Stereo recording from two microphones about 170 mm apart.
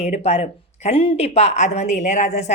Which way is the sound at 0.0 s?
40° left (ahead or behind).